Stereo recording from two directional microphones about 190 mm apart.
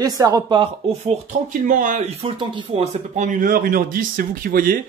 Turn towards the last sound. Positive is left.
turn(degrees=-50)  # may be behind; listen again after turning